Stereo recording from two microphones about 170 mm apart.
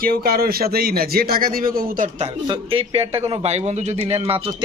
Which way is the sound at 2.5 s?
30° right (ahead or behind).